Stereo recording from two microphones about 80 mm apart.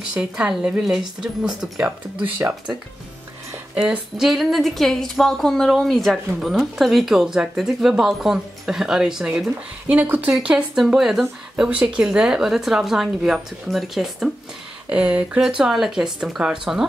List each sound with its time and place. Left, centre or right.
0.0 s speech: centre
3.7 s a woman's voice: centre
10.0 s speech: right
10.4 s speech: centre
14.9 s speech: centre